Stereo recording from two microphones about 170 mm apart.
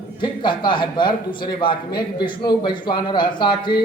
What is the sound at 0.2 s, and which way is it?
Speech, 25° left (ahead or behind).